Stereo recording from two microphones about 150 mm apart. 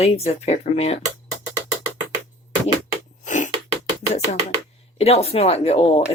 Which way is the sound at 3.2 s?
60° left (ahead or behind).